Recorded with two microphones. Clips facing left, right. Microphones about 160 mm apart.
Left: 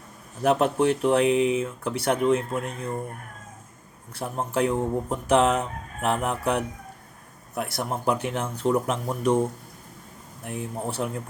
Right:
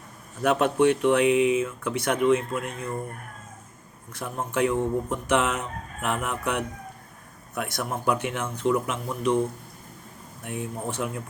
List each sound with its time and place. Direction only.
0.4 s speech: 35° left (ahead or behind)
4.1 s speech: 35° left (ahead or behind)
10.4 s speech: 35° left (ahead or behind)